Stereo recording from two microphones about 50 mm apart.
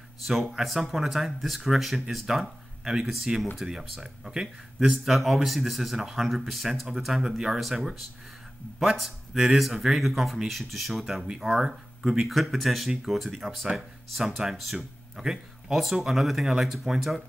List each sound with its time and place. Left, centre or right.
0.3 s speech: centre